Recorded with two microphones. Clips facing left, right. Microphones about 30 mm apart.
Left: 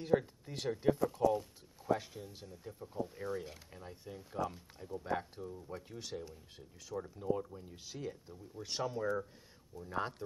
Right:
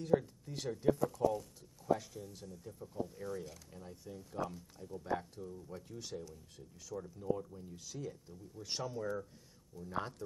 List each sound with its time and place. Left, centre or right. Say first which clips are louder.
0.0 s speech: even; left